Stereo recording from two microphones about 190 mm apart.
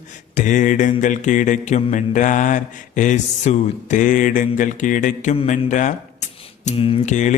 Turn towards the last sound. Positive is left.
turn(degrees=40)  # may be behind; listen again after turning